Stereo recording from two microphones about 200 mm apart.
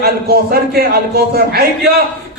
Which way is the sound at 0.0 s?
50° right (ahead or behind).